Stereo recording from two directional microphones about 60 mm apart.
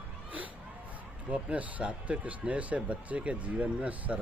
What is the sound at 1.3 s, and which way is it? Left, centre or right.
Speech, right.